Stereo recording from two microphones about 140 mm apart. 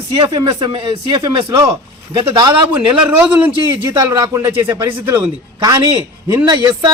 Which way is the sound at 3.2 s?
10° right (ahead or behind).